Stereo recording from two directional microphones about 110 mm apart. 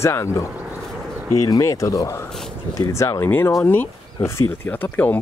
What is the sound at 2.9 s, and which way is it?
Speech, 25° left (ahead or behind).